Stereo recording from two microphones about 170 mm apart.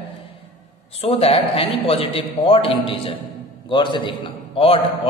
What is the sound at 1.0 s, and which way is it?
A man's voice, 35° left (ahead or behind).